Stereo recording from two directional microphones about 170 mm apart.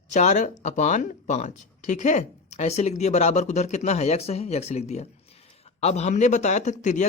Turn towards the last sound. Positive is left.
turn(degrees=45)  # may be behind; listen again after turning